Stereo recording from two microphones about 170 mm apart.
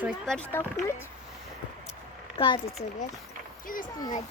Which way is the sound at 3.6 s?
55° left (ahead or behind).